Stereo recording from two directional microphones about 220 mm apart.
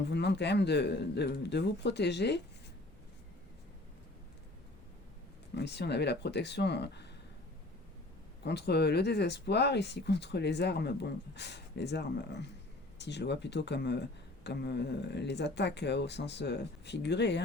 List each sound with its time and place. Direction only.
0.0 s speech: 50° left (ahead or behind)
5.5 s speech: 50° left (ahead or behind)
8.4 s speech: 50° left (ahead or behind)